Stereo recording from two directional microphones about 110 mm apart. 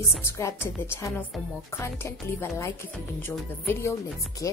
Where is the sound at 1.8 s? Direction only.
20° left (ahead or behind).